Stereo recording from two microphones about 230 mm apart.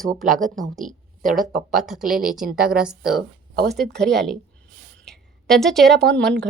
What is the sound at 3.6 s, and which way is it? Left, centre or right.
Speech, right.